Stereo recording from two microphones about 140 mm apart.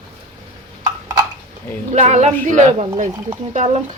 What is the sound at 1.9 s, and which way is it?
Speech, 55° right (ahead or behind).